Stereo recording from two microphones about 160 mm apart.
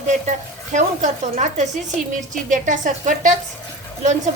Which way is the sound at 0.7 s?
50° right (ahead or behind).